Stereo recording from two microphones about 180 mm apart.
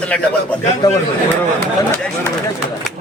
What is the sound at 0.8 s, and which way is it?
Speech, 20° left (ahead or behind).